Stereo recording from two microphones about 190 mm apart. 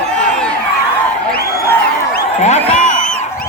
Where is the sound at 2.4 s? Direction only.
35° left (ahead or behind).